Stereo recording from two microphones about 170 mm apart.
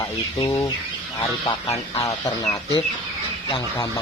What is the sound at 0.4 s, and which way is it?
Speech, 15° left (ahead or behind).